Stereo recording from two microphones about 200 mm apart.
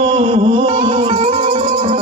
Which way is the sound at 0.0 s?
30° right (ahead or behind).